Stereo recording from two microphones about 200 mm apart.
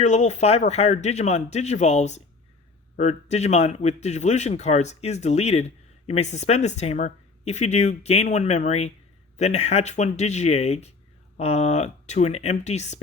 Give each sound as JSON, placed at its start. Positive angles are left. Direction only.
{"t": 0.0, "sound": "a man's voice", "side_deg": 35}